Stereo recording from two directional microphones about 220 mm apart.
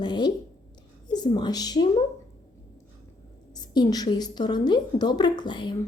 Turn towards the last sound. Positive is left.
turn(degrees=20)  # may be behind; listen again after turning